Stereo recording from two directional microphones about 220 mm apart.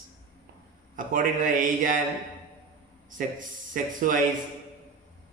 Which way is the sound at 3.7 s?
40° right (ahead or behind).